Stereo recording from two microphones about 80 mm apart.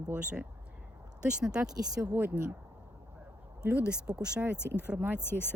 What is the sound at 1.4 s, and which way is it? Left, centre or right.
Speech, centre.